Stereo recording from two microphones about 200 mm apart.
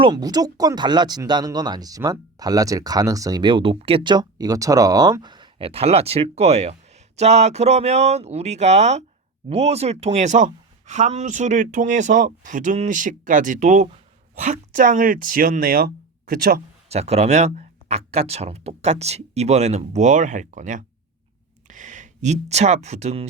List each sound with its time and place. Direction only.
0.0 s speech: 20° right (ahead or behind); by 16.6 s 45° right (ahead or behind)
16.9 s speech: 30° right (ahead or behind)